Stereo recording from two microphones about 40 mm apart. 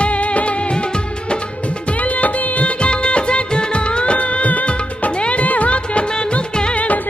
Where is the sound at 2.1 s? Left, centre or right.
Left.